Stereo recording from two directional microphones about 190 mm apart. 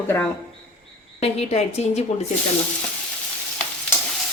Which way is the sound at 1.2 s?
35° left (ahead or behind).